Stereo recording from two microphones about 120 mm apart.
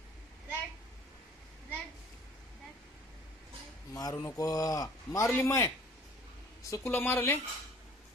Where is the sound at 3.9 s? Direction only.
25° left (ahead or behind).